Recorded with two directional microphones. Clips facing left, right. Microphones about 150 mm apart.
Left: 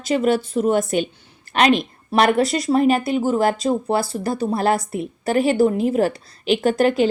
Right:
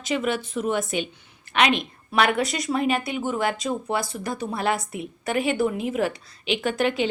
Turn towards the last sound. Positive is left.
turn(degrees=40)  # may be behind; listen again after turning